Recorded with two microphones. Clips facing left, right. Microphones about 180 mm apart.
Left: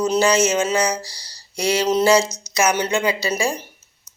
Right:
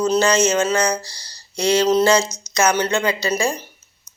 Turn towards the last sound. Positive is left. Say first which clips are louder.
# right 1 dB
turn(degrees=15)  # may be behind; listen again after turning